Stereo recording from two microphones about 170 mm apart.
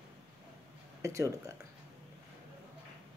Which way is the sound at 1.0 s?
20° right (ahead or behind).